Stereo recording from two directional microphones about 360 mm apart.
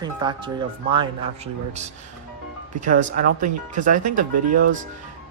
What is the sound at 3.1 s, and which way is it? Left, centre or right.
Speech, right.